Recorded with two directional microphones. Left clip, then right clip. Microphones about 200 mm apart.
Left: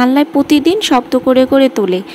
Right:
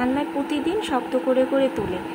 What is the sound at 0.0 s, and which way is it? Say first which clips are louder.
A woman's voice: left 12 dB; 45° left (ahead or behind).